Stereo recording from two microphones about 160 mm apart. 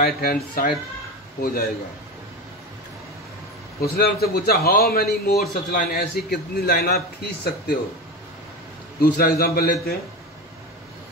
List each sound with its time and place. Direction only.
0.0 s a man's voice: 70° left (ahead or behind)
3.8 s a man's voice: 75° left (ahead or behind)
9.0 s a man's voice: 70° left (ahead or behind)